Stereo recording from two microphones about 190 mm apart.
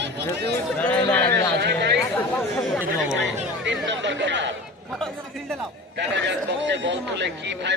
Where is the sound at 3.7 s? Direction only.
70° right (ahead or behind).